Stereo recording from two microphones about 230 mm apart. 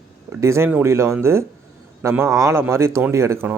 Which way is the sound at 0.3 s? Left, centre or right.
Centre.